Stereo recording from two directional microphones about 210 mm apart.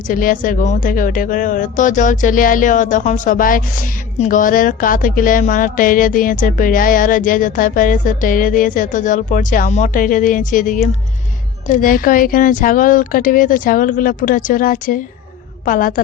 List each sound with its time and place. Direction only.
0.1 s speech: 40° left (ahead or behind)